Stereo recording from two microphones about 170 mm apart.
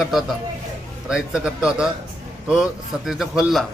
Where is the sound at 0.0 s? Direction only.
Centre (ahead or behind).